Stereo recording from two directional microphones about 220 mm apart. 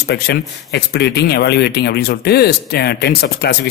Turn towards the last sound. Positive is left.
turn(degrees=45)  # may be behind; listen again after turning